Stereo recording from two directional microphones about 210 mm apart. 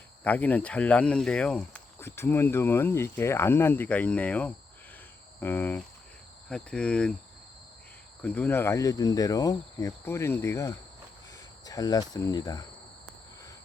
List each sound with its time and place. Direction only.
0.3 s speech: 5° left (ahead or behind)
6.5 s cricket: 5° left (ahead or behind)
8.2 s speech: 10° left (ahead or behind)